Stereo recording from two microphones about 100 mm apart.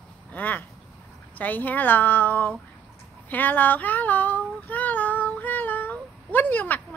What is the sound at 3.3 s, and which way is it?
Child singing, 15° left (ahead or behind).